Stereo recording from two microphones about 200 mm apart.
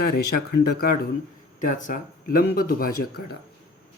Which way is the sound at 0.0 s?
50° left (ahead or behind).